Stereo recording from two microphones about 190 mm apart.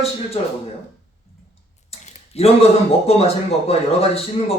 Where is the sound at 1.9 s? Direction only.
35° left (ahead or behind).